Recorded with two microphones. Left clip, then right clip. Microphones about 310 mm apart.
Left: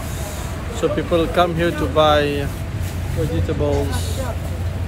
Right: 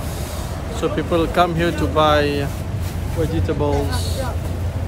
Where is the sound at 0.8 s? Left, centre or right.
Centre.